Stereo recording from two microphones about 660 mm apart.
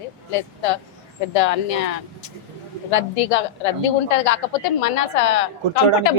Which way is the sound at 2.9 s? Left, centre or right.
Left.